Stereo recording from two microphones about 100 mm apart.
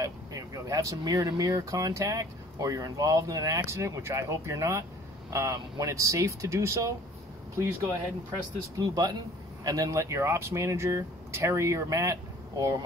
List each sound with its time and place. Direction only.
0.0 s vehicle: 35° right (ahead or behind)
1.4 s speech: 35° right (ahead or behind)
8.7 s speech: 40° right (ahead or behind)